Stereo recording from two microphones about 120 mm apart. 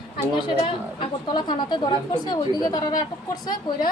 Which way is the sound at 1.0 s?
40° left (ahead or behind).